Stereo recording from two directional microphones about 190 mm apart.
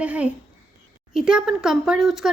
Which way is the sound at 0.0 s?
5° right (ahead or behind).